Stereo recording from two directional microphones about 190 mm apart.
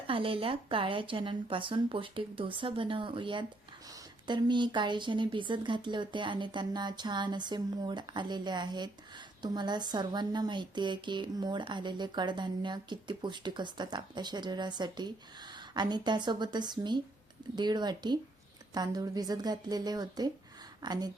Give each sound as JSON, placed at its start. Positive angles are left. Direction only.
{"t": 0.1, "sound": "speech", "side_deg": -30}